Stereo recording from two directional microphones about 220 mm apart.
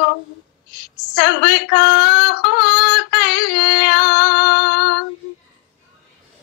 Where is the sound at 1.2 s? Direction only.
50° left (ahead or behind).